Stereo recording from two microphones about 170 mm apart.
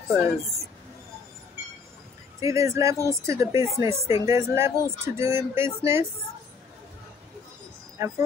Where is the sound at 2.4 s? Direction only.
20° right (ahead or behind).